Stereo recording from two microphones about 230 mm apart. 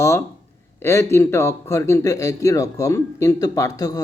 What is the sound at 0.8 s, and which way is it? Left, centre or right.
A man's voice, centre.